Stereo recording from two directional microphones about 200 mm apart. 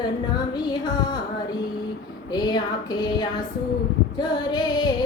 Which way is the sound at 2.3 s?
20° left (ahead or behind).